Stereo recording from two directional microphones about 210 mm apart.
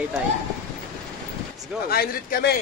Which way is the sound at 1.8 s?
45° left (ahead or behind).